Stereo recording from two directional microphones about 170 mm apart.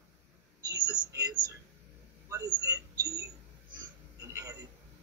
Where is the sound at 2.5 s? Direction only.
20° right (ahead or behind).